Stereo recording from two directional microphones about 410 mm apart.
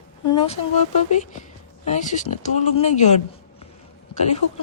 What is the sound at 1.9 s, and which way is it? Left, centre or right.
Speech, centre.